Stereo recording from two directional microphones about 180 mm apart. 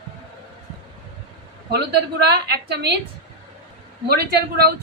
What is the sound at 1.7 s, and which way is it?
A woman's voice, 65° right (ahead or behind).